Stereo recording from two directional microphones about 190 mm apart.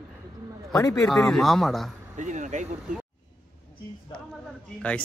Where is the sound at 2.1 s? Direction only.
40° right (ahead or behind).